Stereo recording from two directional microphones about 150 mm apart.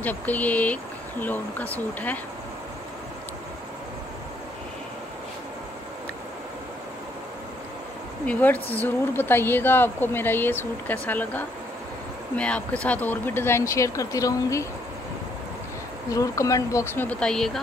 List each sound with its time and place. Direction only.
0.0 s speech: 10° left (ahead or behind)
8.3 s speech: 10° left (ahead or behind)
16.1 s speech: 20° left (ahead or behind); by 17.5 s 5° left (ahead or behind)